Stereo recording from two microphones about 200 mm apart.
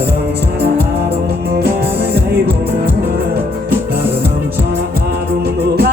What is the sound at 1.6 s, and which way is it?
Music, 55° right (ahead or behind).